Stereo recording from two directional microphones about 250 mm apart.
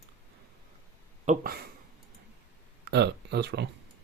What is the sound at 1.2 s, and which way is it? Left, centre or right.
Speech, right.